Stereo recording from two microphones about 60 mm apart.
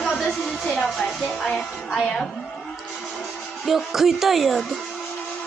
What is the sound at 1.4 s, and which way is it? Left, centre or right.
Speech, centre.